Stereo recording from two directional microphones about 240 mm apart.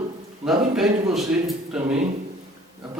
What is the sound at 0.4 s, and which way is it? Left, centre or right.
A man's voice, centre.